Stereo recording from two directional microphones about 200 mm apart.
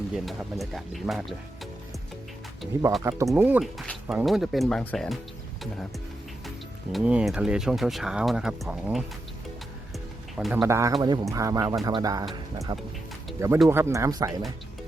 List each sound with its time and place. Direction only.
0.1 s speech: centre (ahead or behind)
3.0 s speech: 15° right (ahead or behind); by 5.1 s 5° left (ahead or behind)
6.9 s speech: 5° right (ahead or behind)
10.3 s speech: 5° right (ahead or behind); by 14.4 s 20° right (ahead or behind)